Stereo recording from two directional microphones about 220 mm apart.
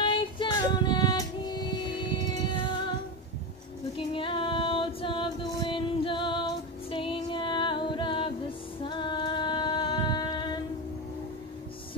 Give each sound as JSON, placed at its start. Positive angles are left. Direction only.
{"t": 0.0, "sound": "female singing", "side_deg": 20}
{"t": 3.9, "sound": "female singing", "side_deg": 25}
{"t": 6.9, "sound": "music", "side_deg": 25}